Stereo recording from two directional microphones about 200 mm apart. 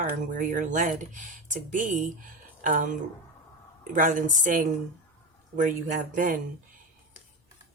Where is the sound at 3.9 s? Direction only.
40° right (ahead or behind).